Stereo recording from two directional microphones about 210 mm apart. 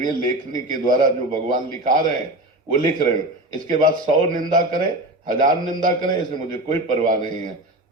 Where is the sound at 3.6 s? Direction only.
40° right (ahead or behind).